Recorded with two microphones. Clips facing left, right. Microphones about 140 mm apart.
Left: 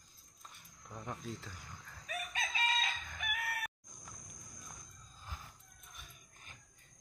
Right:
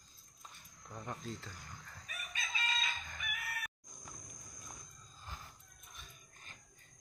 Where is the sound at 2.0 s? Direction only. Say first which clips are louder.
Left 7 dB; 85° left; by 3.7 s 70° left (ahead or behind).